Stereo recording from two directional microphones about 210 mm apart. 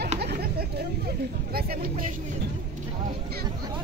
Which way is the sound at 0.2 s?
50° right (ahead or behind).